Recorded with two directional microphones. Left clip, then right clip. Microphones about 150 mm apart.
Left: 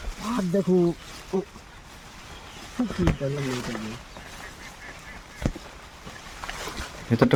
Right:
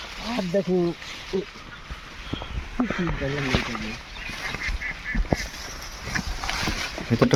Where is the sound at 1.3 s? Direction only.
70° left (ahead or behind).